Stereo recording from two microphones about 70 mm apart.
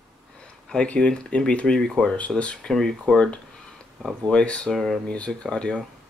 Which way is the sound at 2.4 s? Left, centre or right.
Centre.